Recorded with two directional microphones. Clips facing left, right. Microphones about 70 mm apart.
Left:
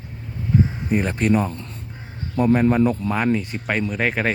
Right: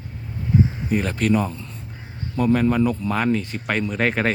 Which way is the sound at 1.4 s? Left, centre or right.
Left.